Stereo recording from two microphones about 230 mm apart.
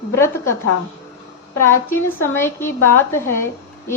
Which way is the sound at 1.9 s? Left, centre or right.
Centre.